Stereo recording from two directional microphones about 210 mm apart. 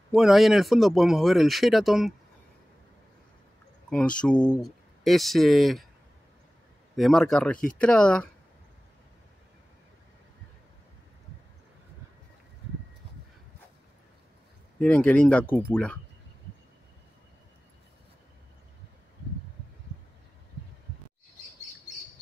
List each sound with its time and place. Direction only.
0.1 s speech: centre (ahead or behind)
3.9 s speech: 5° left (ahead or behind)
7.0 s speech: centre (ahead or behind)
14.8 s speech: 5° left (ahead or behind)